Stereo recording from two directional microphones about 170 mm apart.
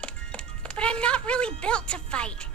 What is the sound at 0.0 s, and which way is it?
Music, 5° left (ahead or behind).